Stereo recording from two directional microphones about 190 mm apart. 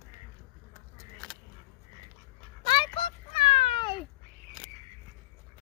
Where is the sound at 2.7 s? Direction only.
25° left (ahead or behind).